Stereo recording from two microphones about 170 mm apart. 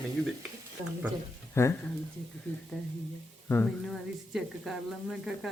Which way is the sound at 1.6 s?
15° left (ahead or behind).